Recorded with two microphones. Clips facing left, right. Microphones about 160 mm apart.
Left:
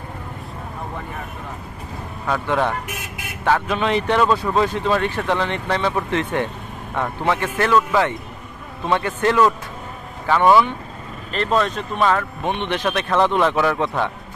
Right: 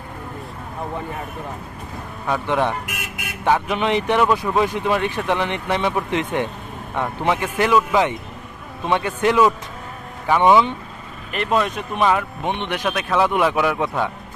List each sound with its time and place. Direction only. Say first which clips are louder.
2.2 s speech: even; 15° right (ahead or behind)